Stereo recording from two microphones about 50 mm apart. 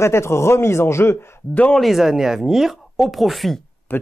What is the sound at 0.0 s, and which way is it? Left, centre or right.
A man's voice, left.